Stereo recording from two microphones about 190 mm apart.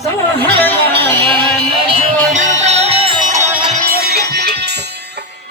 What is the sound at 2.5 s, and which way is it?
Music, 35° right (ahead or behind).